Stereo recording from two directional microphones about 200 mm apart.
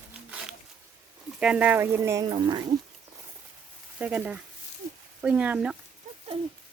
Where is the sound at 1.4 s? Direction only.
5° right (ahead or behind); by 2.6 s 20° right (ahead or behind).